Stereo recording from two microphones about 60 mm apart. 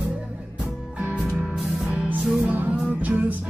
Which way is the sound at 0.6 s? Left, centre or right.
Right.